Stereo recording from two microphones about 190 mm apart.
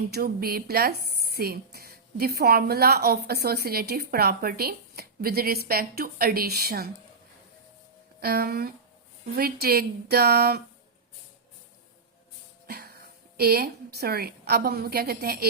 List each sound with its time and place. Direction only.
0.1 s a woman's voice: 55° right (ahead or behind)
8.2 s a woman's voice: 55° right (ahead or behind)
12.6 s a woman's voice: 55° right (ahead or behind)